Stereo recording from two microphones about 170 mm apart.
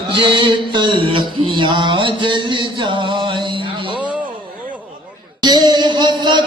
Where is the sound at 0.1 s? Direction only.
25° right (ahead or behind).